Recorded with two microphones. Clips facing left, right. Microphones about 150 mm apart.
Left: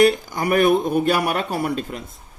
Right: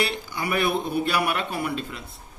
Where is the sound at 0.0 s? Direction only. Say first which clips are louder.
Left 11 dB; 45° left (ahead or behind).